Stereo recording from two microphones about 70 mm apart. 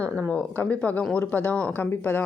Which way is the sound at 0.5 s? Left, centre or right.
Centre.